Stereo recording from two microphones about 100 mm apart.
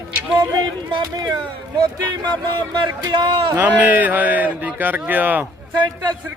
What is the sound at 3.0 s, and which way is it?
Speech, 45° right (ahead or behind).